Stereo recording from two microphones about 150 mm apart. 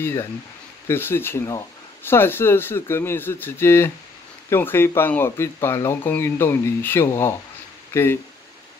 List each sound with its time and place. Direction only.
0.0 s speech: 15° left (ahead or behind)